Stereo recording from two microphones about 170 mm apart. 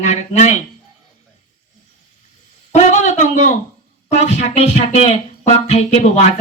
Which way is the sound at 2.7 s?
45° left (ahead or behind).